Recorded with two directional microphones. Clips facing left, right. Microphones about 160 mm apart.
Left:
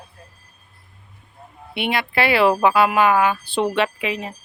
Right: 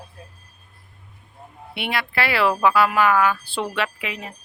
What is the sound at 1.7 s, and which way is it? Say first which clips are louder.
Speech: left 4 dB; 20° left (ahead or behind).